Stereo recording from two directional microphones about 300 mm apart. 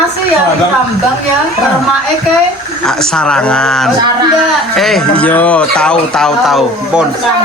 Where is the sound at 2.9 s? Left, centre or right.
Centre.